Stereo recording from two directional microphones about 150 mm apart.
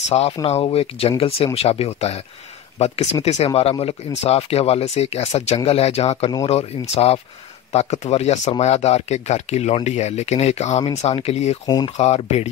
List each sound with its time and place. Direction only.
0.1 s speech: 45° left (ahead or behind)
11.6 s speech: 25° left (ahead or behind)
12.0 s speech: 45° left (ahead or behind)